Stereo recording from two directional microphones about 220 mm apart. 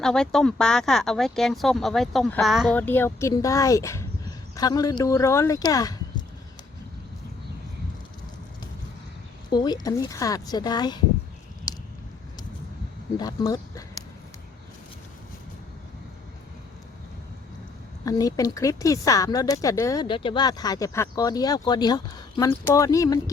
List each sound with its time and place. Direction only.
0.0 s speech: 5° left (ahead or behind)
9.5 s speech: 20° left (ahead or behind)
13.1 s speech: 15° left (ahead or behind)
18.0 s speech: 15° left (ahead or behind)